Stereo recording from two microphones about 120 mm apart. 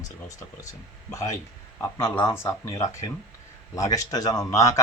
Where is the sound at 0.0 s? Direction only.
25° left (ahead or behind).